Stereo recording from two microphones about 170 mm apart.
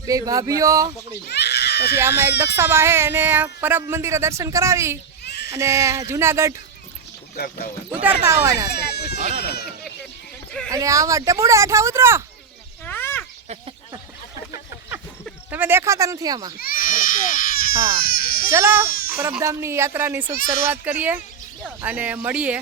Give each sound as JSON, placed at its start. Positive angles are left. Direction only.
{"t": 0.0, "sound": "speech", "side_deg": -20}
{"t": 1.3, "sound": "baby cry", "side_deg": 75}
{"t": 2.0, "sound": "speech", "side_deg": -15}
{"t": 5.2, "sound": "a sound", "side_deg": 80}
{"t": 5.5, "sound": "speech", "side_deg": -15}
{"t": 7.3, "sound": "speech", "side_deg": 65}
{"t": 8.2, "sound": "speech", "side_deg": -15}
{"t": 8.9, "sound": "a sound", "side_deg": 75}
{"t": 9.1, "sound": "speech", "side_deg": -45}
{"t": 10.7, "sound": "speech", "side_deg": -20}
{"t": 12.8, "sound": "a sound", "side_deg": 10}
{"t": 14.8, "sound": "a sound", "side_deg": -10}
{"t": 16.6, "sound": "baby cry", "side_deg": 60}
{"t": 18.5, "sound": "speech", "side_deg": -15}